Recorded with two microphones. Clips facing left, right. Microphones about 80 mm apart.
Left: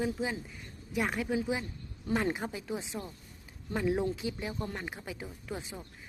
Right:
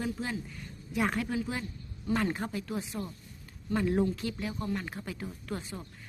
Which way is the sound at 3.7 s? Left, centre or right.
Centre.